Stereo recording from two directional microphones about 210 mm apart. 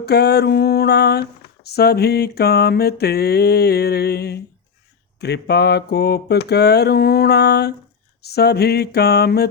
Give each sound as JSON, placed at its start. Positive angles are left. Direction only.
{"t": 0.0, "sound": "speech", "side_deg": 50}